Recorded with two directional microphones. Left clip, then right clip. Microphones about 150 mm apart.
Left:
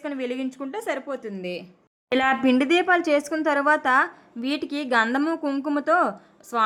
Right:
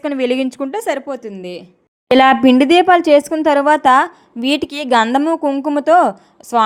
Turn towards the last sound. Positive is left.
turn(degrees=-35)  # may be behind; listen again after turning